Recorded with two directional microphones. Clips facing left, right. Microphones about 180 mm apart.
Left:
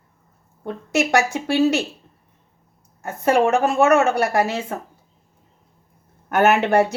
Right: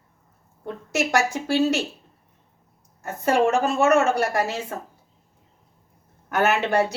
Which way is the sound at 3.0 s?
65° left (ahead or behind).